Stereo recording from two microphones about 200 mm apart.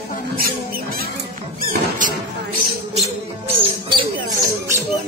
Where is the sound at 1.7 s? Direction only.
40° right (ahead or behind).